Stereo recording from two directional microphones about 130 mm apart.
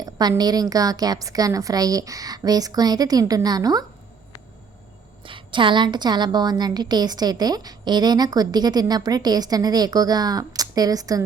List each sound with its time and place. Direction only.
0.0 s a woman's voice: 30° right (ahead or behind)
5.2 s a woman's voice: 40° right (ahead or behind)